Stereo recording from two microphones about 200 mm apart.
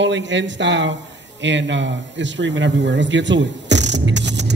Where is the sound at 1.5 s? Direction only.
65° right (ahead or behind).